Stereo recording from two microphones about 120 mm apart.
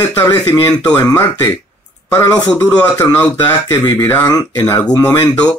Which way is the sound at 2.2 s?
30° left (ahead or behind).